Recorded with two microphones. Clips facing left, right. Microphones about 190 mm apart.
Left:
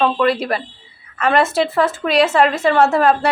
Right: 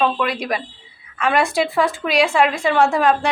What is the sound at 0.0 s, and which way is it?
Speech, 10° right (ahead or behind).